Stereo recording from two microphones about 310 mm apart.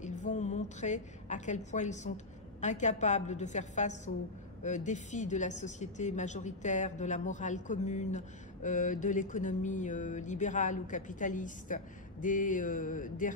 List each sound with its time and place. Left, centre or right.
0.2 s a woman's voice: left